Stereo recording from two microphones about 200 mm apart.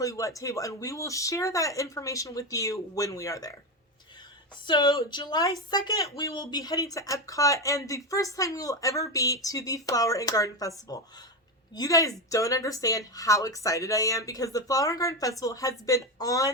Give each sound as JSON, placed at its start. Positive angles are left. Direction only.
{"t": 0.0, "sound": "speech", "side_deg": 15}
{"t": 4.6, "sound": "speech", "side_deg": 20}